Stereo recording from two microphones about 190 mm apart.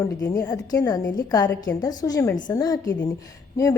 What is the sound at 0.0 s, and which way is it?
A woman's voice, 15° left (ahead or behind).